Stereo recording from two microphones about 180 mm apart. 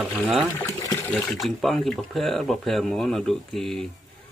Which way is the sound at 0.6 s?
15° left (ahead or behind).